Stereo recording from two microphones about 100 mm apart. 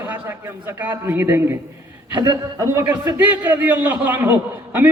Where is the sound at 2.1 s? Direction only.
40° right (ahead or behind).